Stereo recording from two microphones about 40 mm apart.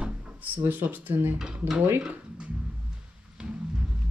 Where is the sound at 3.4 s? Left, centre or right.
Right.